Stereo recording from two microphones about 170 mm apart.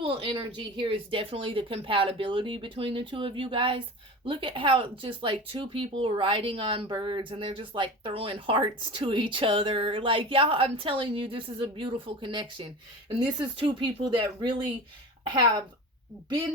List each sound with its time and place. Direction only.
0.0 s speech: 35° right (ahead or behind)